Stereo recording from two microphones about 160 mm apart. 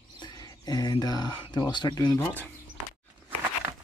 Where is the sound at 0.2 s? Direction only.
25° left (ahead or behind).